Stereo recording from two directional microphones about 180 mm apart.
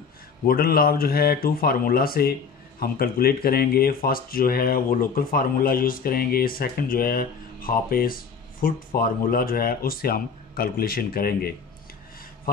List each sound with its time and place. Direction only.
0.5 s speech: 55° left (ahead or behind)